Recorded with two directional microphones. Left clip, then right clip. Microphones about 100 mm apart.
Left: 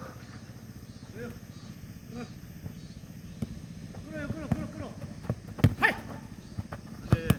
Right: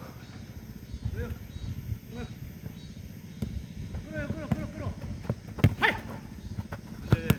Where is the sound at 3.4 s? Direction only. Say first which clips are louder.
Right 1 dB; 20° right (ahead or behind).